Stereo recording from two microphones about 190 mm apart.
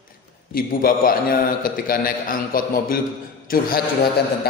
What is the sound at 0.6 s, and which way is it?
A man's voice, 50° left (ahead or behind).